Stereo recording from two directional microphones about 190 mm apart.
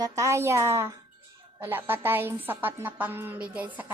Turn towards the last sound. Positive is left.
turn(degrees=-10)  # may be behind; listen again after turning